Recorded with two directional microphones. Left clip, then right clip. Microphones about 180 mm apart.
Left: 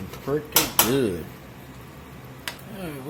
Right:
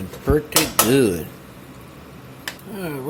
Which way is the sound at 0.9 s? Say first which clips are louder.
Right 6 dB; 30° right (ahead or behind).